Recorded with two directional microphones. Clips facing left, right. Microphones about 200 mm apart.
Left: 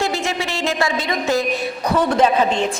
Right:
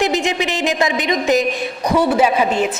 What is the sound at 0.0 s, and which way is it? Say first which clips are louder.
A woman's voice: right 4 dB; 20° right (ahead or behind).